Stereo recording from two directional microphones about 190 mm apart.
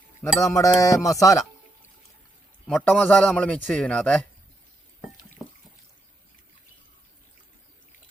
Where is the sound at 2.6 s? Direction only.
5° left (ahead or behind).